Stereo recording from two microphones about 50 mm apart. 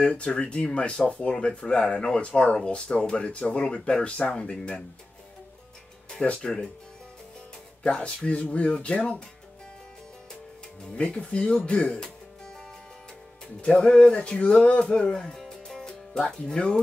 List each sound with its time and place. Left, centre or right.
0.0 s speech: left
6.2 s speech: centre
7.8 s speech: left
11.0 s speech: left
13.6 s speech: left